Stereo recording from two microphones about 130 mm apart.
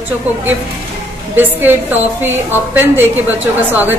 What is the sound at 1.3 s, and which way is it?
A woman's voice, 15° right (ahead or behind).